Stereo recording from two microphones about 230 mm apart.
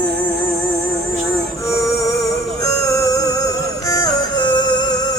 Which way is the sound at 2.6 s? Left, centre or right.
Centre.